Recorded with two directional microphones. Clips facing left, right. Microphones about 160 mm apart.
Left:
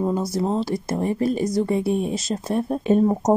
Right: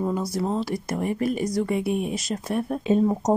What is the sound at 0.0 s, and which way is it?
Speech, 25° left (ahead or behind).